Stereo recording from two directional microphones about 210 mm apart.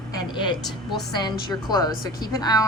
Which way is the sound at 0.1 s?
20° left (ahead or behind).